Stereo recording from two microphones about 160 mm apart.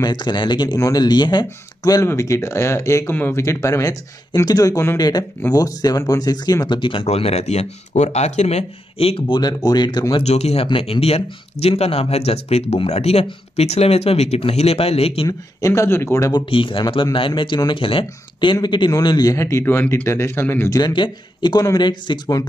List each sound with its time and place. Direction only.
0.0 s speech: 25° left (ahead or behind)
10.2 s speech: 40° left (ahead or behind)
15.2 s speech: 20° left (ahead or behind)
20.8 s speech: 30° left (ahead or behind)